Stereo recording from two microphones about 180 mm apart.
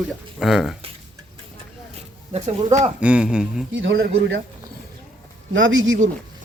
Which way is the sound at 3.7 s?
90° right.